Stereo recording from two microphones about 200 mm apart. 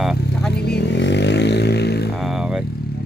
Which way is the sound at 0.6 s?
60° left (ahead or behind).